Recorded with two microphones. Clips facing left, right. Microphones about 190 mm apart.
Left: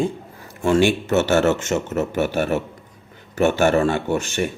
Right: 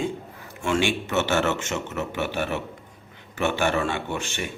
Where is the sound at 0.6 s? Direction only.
40° left (ahead or behind).